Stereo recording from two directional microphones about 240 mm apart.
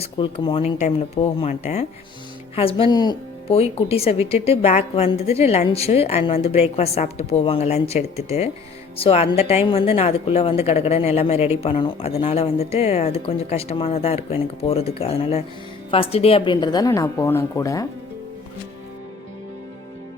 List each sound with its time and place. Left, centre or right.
0.0 s a woman's voice: left